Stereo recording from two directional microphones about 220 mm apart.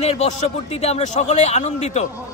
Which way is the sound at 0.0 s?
30° left (ahead or behind).